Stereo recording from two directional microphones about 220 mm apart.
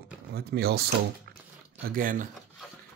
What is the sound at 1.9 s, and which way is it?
Speech, 40° right (ahead or behind).